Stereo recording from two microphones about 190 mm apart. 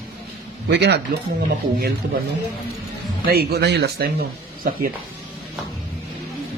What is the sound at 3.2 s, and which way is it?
Speech, 55° right (ahead or behind).